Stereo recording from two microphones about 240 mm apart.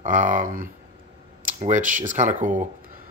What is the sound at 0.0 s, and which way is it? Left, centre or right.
Speech, right.